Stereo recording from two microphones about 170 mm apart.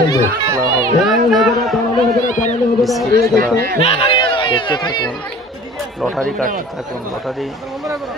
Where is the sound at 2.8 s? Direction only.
Centre (ahead or behind).